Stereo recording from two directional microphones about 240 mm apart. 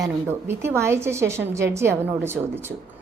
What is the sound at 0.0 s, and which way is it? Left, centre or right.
A woman's voice, centre.